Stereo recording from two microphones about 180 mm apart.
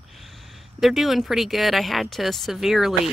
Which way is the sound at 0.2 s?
Centre (ahead or behind).